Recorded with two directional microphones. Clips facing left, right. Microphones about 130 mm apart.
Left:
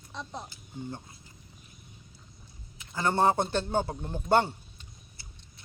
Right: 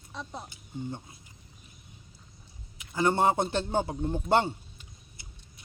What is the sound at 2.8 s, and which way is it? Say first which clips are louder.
A man's voice: right 1 dB; 15° right (ahead or behind).